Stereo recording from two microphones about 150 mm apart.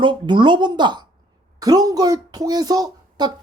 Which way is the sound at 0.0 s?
30° right (ahead or behind).